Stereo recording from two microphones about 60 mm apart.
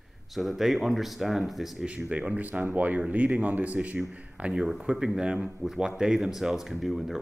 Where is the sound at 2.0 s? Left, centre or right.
Right.